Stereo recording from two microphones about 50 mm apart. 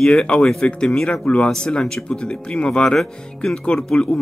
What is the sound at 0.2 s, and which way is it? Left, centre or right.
Speech, centre.